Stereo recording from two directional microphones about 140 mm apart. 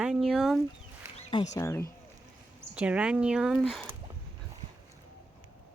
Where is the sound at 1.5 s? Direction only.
20° left (ahead or behind).